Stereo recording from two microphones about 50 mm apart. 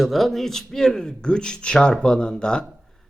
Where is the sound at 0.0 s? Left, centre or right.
Centre.